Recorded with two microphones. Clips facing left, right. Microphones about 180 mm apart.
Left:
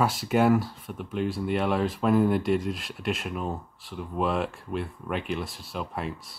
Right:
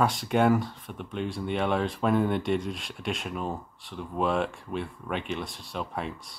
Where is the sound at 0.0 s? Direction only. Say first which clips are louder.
Left 1 dB; 5° left (ahead or behind).